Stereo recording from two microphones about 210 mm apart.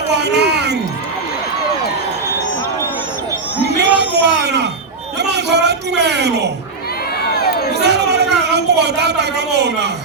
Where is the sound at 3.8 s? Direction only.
55° right (ahead or behind).